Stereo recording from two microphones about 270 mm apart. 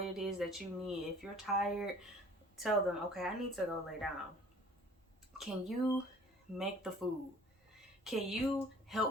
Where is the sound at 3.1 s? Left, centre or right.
Centre.